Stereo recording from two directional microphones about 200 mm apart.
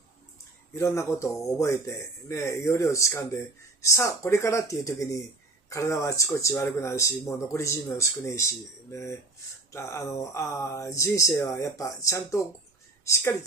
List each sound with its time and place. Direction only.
0.7 s speech: 15° left (ahead or behind)